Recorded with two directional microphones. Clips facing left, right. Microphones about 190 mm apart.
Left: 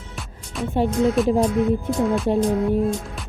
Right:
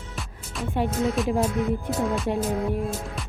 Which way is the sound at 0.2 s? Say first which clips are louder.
Left 5 dB; centre (ahead or behind).